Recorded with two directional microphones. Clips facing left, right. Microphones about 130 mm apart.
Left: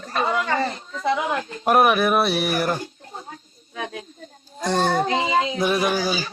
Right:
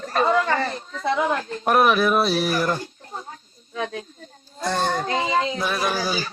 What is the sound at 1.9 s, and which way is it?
Speech, 55° left (ahead or behind).